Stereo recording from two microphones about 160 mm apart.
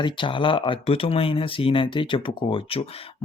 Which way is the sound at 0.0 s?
30° left (ahead or behind).